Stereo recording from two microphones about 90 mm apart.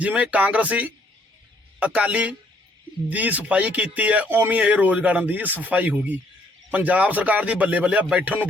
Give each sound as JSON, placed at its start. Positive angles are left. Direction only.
{"t": 0.0, "sound": "speech", "side_deg": -15}